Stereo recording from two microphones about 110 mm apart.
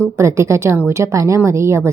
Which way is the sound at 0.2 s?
25° right (ahead or behind).